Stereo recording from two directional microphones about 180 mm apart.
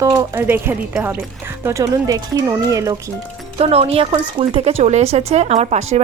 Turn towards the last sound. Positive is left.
turn(degrees=-35)  # may be behind; listen again after turning